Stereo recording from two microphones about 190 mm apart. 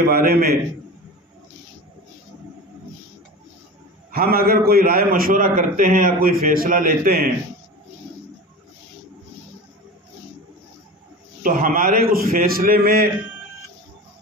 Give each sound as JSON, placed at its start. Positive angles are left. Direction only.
{"t": 0.1, "sound": "a man's voice", "side_deg": -50}
{"t": 4.1, "sound": "a man's voice", "side_deg": -50}
{"t": 11.4, "sound": "a man's voice", "side_deg": -45}